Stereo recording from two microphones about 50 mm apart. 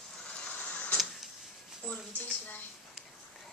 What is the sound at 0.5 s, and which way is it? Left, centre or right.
Printer, left.